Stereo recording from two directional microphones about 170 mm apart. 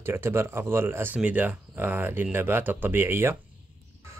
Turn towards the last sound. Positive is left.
turn(degrees=-15)  # may be behind; listen again after turning